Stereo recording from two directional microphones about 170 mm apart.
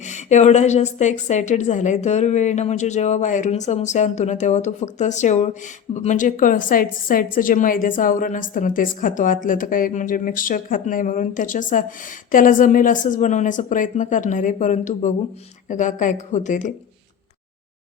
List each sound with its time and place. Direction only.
0.0 s a woman's voice: 45° left (ahead or behind)